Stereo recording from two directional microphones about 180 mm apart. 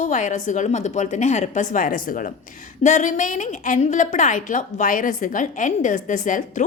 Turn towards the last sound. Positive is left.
turn(degrees=45)  # may be behind; listen again after turning